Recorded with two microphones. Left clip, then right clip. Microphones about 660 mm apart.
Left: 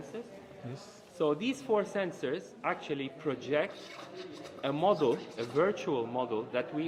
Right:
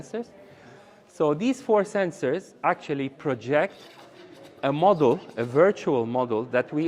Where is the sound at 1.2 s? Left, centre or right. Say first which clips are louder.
Right 7 dB; right.